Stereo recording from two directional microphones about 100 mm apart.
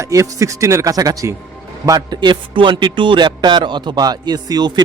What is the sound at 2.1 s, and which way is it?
Speech, 55° right (ahead or behind).